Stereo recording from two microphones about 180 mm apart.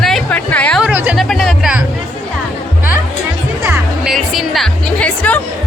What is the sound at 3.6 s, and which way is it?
Music, 10° right (ahead or behind).